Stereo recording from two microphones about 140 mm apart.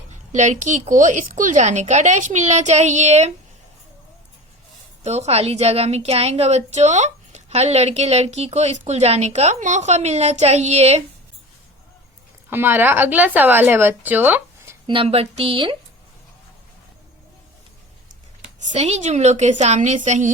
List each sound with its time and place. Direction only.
0.3 s speech: 60° right (ahead or behind)
5.0 s a woman's voice: 50° right (ahead or behind)
12.5 s speech: 15° right (ahead or behind)
14.8 s a woman's voice: 40° right (ahead or behind)
18.6 s speech: 55° right (ahead or behind)